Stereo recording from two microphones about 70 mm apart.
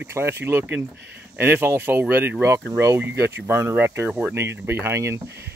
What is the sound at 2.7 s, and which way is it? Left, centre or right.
Speech, right.